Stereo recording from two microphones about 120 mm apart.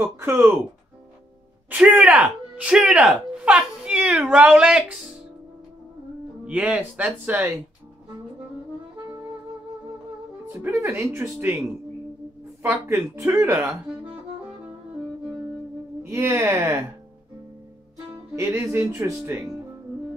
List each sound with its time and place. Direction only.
1.7 s speech: 10° right (ahead or behind)
6.4 s speech: 10° right (ahead or behind)
10.5 s speech: 25° right (ahead or behind)
12.6 s speech: 25° right (ahead or behind)
16.0 s speech: 20° right (ahead or behind)
18.1 s speech: 25° right (ahead or behind)